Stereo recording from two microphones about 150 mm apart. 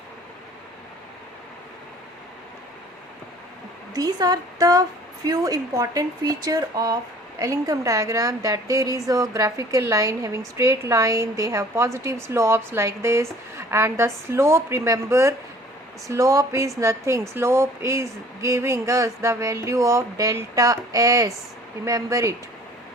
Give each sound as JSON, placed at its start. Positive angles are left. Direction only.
{"t": 3.9, "sound": "a woman's voice", "side_deg": -25}